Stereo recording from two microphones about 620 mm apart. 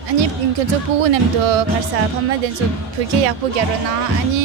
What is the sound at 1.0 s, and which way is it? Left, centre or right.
Music, right.